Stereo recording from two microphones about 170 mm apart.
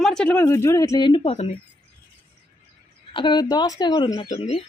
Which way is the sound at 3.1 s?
30° left (ahead or behind).